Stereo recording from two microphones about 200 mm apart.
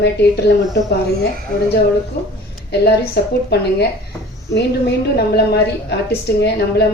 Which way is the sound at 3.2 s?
55° left (ahead or behind).